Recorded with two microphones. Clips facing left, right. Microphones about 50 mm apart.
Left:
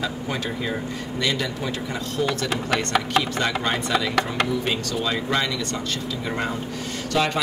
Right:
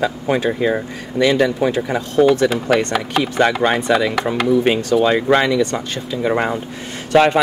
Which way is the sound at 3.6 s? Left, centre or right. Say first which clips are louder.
Right 8 dB; right.